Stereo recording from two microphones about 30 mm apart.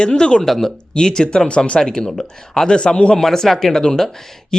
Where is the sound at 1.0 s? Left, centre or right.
Left.